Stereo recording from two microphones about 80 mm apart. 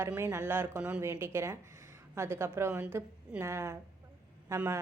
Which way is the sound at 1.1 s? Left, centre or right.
Right.